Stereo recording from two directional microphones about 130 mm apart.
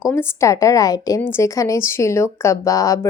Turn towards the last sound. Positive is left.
turn(degrees=25)  # may be behind; listen again after turning